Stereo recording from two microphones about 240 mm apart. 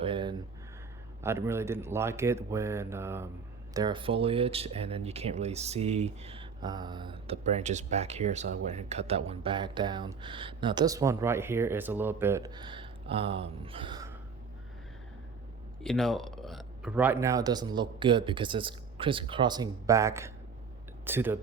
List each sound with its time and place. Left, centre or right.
0.0 s a sound: right
1.2 s speech: centre
15.8 s speech: centre